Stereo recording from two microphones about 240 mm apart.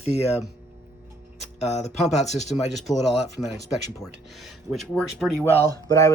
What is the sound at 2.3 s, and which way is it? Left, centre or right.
Speech, left.